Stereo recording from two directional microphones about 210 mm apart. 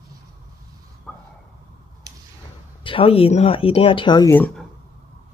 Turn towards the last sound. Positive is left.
turn(degrees=10)  # may be behind; listen again after turning